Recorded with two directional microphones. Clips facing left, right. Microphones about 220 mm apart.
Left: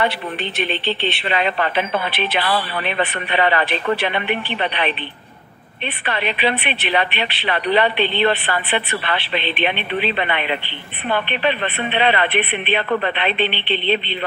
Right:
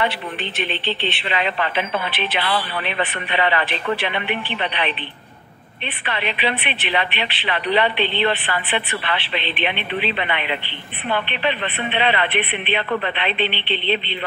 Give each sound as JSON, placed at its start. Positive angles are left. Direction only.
{"t": 0.0, "sound": "a woman's voice", "side_deg": 40}
{"t": 6.0, "sound": "a woman's voice", "side_deg": 45}